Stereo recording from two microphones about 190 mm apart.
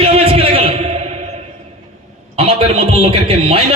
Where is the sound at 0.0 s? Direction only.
30° right (ahead or behind).